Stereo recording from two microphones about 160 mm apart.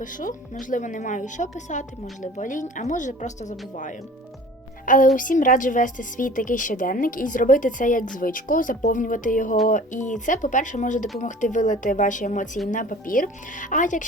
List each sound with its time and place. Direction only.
0.0 s a woman's voice: 55° left (ahead or behind)
4.9 s a woman's voice: 55° left (ahead or behind)